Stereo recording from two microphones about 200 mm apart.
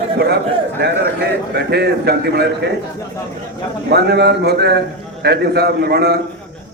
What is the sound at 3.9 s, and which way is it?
A man's voice, 55° right (ahead or behind).